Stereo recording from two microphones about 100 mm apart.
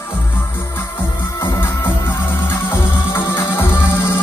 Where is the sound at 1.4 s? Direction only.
20° left (ahead or behind).